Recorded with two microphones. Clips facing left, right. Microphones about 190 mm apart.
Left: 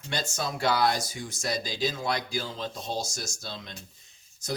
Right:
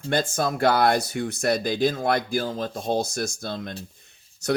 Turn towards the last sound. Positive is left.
turn(degrees=-70)  # may be behind; listen again after turning